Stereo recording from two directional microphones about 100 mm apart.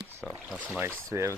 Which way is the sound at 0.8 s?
25° right (ahead or behind).